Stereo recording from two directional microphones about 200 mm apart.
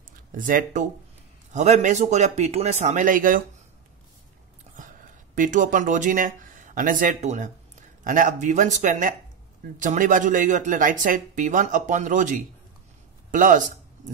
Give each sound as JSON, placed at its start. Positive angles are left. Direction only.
{"t": 0.3, "sound": "speech", "side_deg": -45}
{"t": 5.3, "sound": "speech", "side_deg": -40}